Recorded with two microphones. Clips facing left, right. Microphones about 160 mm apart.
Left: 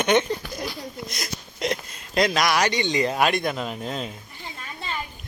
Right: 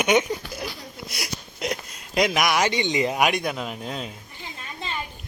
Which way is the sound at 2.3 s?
15° right (ahead or behind).